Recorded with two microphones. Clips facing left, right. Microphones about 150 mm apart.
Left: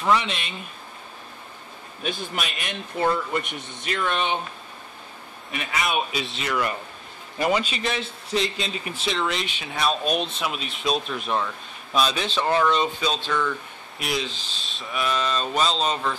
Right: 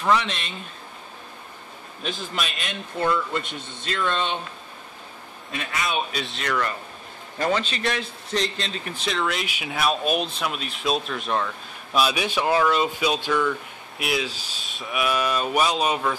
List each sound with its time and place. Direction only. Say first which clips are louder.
0.0 s a man's voice: even; centre (ahead or behind)
2.6 s speech: left 3 dB; 15° left (ahead or behind)
5.5 s a man's voice: left 1 dB; 20° left (ahead or behind)
6.1 s a man's voice: even; centre (ahead or behind)